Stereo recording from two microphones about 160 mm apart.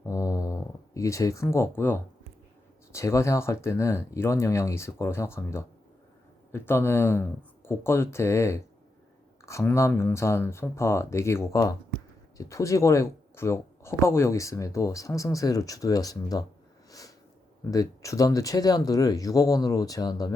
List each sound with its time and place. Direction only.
0.0 s a sound: 20° left (ahead or behind)
2.9 s speech: 15° left (ahead or behind)
17.6 s speech: 20° left (ahead or behind)